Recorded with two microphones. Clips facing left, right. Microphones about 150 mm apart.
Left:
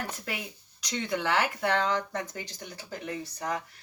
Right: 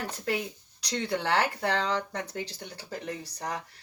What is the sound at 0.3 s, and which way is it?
Speech, 30° right (ahead or behind).